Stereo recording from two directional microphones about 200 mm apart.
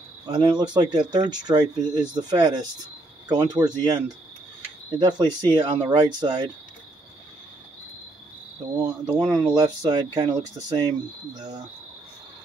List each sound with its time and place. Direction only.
0.3 s speech: 20° right (ahead or behind)
8.7 s speech: 20° right (ahead or behind)